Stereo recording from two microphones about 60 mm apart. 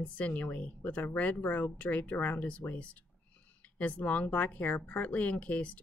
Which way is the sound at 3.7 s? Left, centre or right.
Left.